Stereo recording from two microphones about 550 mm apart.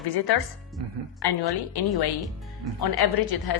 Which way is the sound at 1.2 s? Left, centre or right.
Left.